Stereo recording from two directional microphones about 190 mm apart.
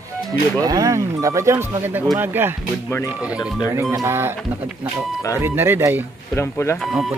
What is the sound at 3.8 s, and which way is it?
Speech, 15° right (ahead or behind).